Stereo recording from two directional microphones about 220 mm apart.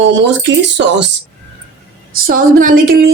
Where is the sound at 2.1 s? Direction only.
40° right (ahead or behind).